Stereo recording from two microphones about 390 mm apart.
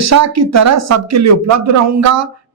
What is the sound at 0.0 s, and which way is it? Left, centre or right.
A woman's voice, right.